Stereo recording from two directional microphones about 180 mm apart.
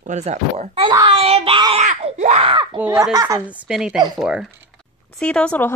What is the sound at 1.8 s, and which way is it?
Screaming, 40° right (ahead or behind).